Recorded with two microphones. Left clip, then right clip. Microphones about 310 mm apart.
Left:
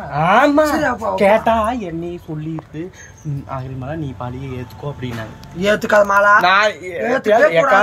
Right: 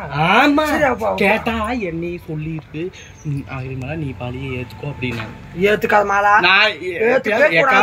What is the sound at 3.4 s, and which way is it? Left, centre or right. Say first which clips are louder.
Speech: left 4 dB; centre.